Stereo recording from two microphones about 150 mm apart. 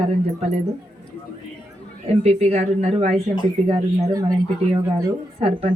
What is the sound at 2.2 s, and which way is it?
Speech, 45° right (ahead or behind).